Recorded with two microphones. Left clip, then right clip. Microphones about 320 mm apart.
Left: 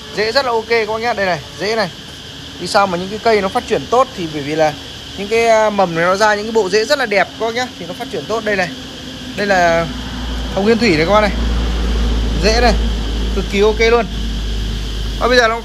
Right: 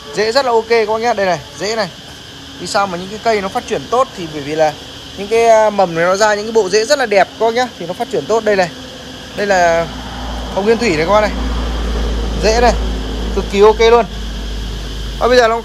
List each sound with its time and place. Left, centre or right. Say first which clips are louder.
0.1 s speech: right 2 dB; centre
13.6 s speech: right 4 dB; centre
15.1 s speech: right 2 dB; centre